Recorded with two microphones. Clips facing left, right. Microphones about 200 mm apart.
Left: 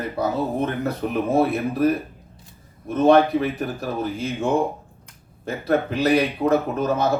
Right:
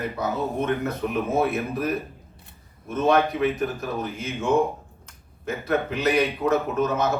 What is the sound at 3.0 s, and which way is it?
Speech, 35° left (ahead or behind).